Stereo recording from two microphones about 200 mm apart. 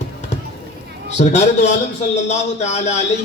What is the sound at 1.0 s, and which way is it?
A man's voice, 35° left (ahead or behind).